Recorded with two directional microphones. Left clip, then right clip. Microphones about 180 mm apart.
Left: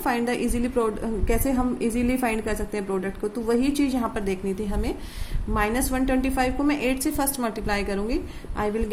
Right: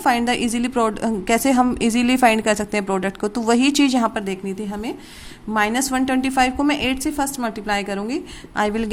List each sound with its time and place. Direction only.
0.0 s a woman's voice: 45° right (ahead or behind)
5.5 s a woman's voice: 45° right (ahead or behind)